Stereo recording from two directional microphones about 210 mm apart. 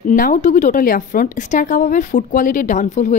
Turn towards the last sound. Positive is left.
turn(degrees=35)  # may be behind; listen again after turning